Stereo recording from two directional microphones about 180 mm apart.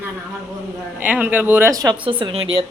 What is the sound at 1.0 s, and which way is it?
A woman's voice, 10° right (ahead or behind).